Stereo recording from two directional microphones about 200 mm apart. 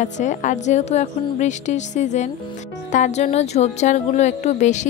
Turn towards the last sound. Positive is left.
turn(degrees=35)  # may be behind; listen again after turning